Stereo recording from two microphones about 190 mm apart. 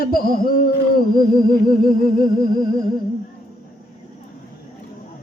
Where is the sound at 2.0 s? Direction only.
50° left (ahead or behind).